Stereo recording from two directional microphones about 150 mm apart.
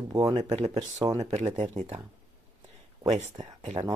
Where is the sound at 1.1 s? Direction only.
50° right (ahead or behind).